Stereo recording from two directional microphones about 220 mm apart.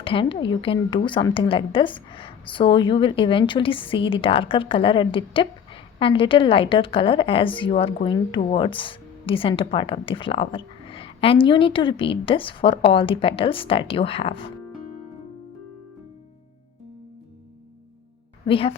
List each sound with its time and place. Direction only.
0.0 s a woman's voice: 25° left (ahead or behind)
18.4 s a woman's voice: 25° left (ahead or behind)